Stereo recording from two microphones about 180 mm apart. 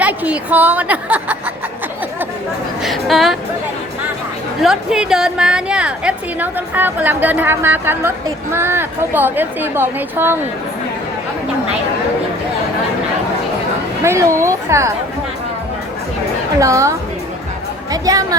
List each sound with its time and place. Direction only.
0.0 s a woman's voice: 10° right (ahead or behind)
2.8 s a woman's voice: centre (ahead or behind)
4.6 s a woman's voice: 5° right (ahead or behind)
14.0 s a woman's voice: 15° right (ahead or behind)
16.6 s a woman's voice: 15° right (ahead or behind)
17.9 s speech: 20° right (ahead or behind)